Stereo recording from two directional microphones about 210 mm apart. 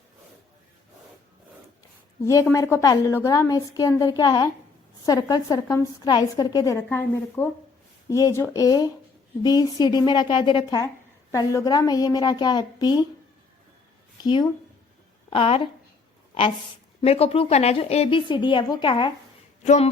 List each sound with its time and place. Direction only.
2.2 s a woman's voice: 15° left (ahead or behind)
15.3 s a woman's voice: 25° left (ahead or behind)
17.0 s a woman's voice: 30° left (ahead or behind)
19.6 s a sound: 35° left (ahead or behind)